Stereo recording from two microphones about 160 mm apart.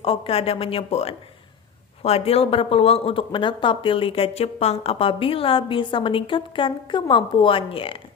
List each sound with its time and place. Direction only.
0.0 s speech: 35° left (ahead or behind)